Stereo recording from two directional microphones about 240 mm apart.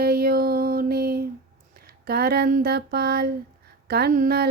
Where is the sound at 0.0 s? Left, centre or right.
Right.